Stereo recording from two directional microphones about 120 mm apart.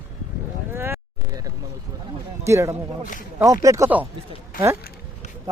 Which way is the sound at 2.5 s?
25° right (ahead or behind).